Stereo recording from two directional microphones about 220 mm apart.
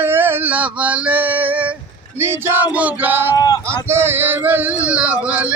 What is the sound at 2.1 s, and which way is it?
Speech, 10° right (ahead or behind).